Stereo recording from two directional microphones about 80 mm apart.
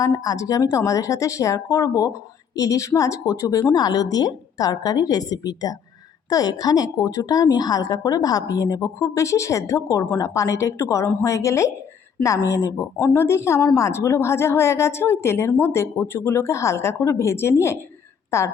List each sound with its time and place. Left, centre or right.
0.0 s a woman's voice: left